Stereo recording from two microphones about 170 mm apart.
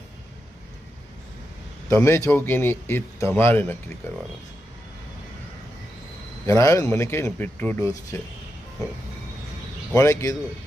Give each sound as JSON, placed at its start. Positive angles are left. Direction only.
{"t": 1.9, "sound": "speech", "side_deg": 15}
{"t": 6.4, "sound": "speech", "side_deg": 15}
{"t": 9.9, "sound": "speech", "side_deg": 15}